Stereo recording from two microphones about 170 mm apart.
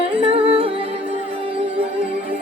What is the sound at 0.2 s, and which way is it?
Music, 35° right (ahead or behind).